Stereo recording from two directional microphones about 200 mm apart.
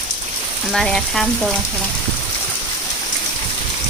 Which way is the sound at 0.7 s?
Centre (ahead or behind).